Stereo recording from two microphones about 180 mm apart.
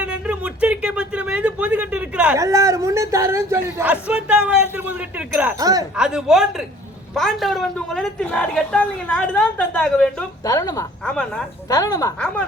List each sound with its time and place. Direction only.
0.0 s a sound: 5° right (ahead or behind)
2.4 s a woman's voice: 15° right (ahead or behind)
4.0 s a sound: 5° right (ahead or behind)
5.5 s speech: 20° right (ahead or behind)
6.0 s a woman's voice: 5° right (ahead or behind)
10.4 s speech: 20° left (ahead or behind)
11.0 s a woman's voice: 5° left (ahead or behind)
11.7 s speech: 20° left (ahead or behind)